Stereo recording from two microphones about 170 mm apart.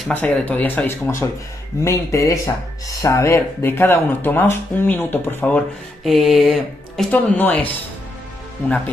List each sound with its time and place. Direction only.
0.0 s speech: 5° left (ahead or behind)
6.0 s speech: centre (ahead or behind)
8.6 s speech: 10° left (ahead or behind)